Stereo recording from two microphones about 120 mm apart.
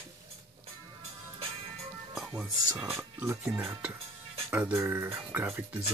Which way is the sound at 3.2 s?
20° right (ahead or behind).